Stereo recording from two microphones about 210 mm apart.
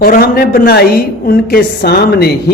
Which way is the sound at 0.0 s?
45° left (ahead or behind).